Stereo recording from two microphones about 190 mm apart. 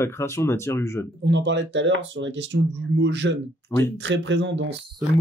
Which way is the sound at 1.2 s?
70° right (ahead or behind).